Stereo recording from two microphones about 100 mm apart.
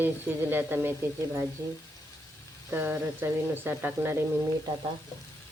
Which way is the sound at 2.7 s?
20° right (ahead or behind).